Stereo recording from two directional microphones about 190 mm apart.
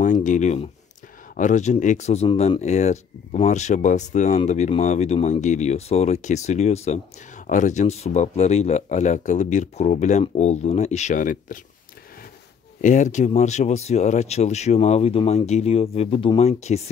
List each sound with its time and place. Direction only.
0.0 s a sound: 40° left (ahead or behind)
1.3 s speech: 40° left (ahead or behind)
12.8 s speech: 40° left (ahead or behind)